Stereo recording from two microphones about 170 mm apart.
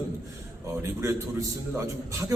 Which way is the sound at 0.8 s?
15° right (ahead or behind).